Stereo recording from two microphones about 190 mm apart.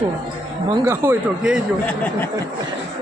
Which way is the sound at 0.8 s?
15° right (ahead or behind).